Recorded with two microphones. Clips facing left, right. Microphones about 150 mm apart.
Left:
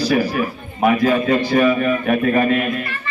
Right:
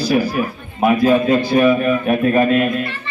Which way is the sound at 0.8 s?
10° right (ahead or behind).